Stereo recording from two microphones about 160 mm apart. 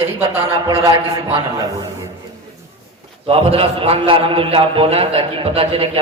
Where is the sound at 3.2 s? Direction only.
35° right (ahead or behind).